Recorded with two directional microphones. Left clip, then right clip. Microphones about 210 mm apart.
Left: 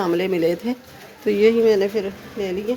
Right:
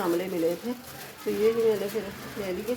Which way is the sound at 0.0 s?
55° left (ahead or behind).